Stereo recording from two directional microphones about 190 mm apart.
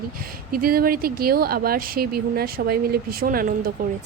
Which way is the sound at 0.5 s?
50° right (ahead or behind).